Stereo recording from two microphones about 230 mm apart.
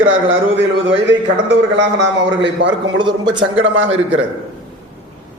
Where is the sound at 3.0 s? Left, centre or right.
Centre.